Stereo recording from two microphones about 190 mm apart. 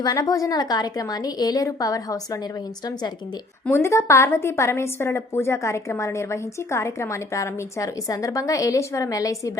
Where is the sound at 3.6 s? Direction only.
10° left (ahead or behind).